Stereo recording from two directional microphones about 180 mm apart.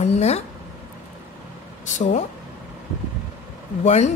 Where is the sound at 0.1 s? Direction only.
35° left (ahead or behind).